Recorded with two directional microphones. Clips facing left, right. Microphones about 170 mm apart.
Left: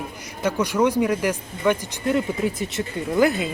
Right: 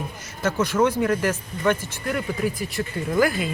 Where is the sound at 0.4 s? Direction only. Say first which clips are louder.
Even; 15° left (ahead or behind).